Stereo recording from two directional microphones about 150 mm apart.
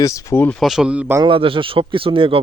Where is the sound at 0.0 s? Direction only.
20° left (ahead or behind).